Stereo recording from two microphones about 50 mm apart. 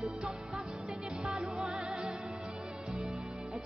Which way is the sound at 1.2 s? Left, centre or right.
Centre.